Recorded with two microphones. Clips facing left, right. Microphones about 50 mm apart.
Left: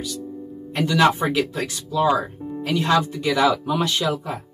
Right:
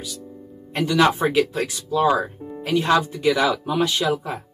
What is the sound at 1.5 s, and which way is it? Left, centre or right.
Speech, centre.